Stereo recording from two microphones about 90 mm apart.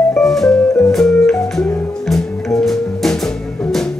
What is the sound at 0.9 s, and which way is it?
Music, 5° left (ahead or behind).